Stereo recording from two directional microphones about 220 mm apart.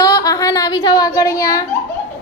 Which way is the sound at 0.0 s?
15° left (ahead or behind).